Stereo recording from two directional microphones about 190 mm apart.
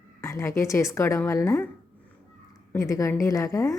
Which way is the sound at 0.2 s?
15° left (ahead or behind).